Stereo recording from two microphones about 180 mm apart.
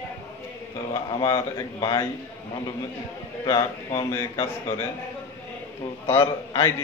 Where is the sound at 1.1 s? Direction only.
30° left (ahead or behind).